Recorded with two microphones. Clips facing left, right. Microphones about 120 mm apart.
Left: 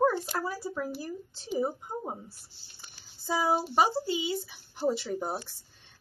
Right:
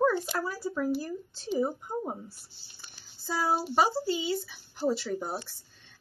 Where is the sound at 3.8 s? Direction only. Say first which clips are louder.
Right 1 dB; 15° left (ahead or behind).